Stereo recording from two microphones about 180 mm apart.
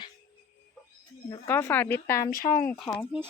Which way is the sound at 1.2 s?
20° left (ahead or behind).